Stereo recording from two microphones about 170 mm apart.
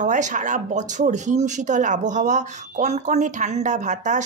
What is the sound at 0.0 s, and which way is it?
Speech, 45° right (ahead or behind).